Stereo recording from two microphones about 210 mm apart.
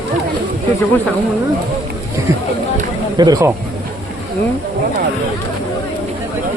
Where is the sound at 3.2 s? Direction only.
15° right (ahead or behind).